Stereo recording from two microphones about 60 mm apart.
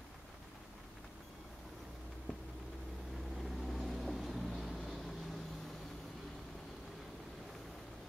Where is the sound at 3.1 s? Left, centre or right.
Centre.